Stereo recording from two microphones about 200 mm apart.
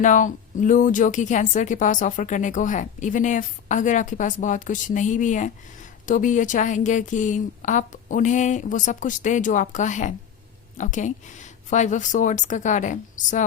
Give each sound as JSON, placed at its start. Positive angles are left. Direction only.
{"t": 0.0, "sound": "speech", "side_deg": 40}